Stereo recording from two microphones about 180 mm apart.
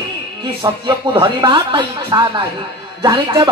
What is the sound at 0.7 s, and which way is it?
Speech, 25° right (ahead or behind).